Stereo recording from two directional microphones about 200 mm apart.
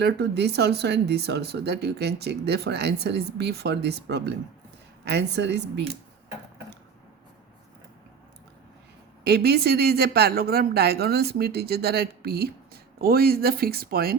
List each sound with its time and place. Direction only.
0.0 s speech: 55° right (ahead or behind)
9.2 s speech: 55° right (ahead or behind)